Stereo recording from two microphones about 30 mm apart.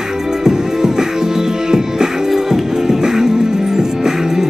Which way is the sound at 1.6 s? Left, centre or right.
Centre.